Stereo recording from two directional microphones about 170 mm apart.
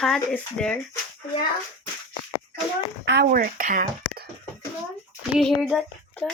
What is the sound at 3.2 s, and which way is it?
Speech, 55° right (ahead or behind).